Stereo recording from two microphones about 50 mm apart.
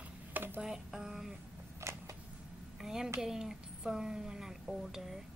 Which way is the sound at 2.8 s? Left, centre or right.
Centre.